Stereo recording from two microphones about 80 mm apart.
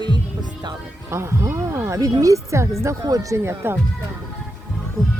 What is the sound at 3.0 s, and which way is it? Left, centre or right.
Speech, right.